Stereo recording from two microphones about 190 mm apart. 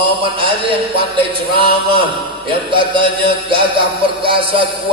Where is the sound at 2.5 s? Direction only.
25° right (ahead or behind).